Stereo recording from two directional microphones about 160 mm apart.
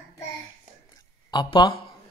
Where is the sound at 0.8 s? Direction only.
25° left (ahead or behind).